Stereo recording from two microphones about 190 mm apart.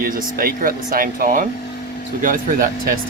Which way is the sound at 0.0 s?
50° right (ahead or behind).